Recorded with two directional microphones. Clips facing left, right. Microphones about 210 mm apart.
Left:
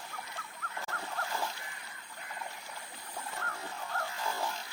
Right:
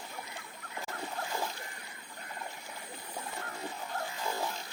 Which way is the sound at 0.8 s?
15° right (ahead or behind).